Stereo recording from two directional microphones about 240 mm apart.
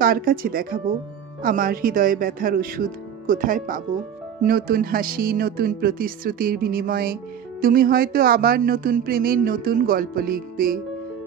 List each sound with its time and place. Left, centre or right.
0.0 s speech: right